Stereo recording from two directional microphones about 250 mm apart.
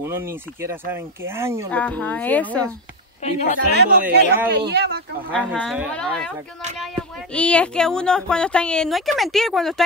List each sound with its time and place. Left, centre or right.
0.0 s speech: centre
1.7 s speech: centre
3.2 s speech: left
3.5 s speech: right
5.3 s speech: centre
7.3 s speech: centre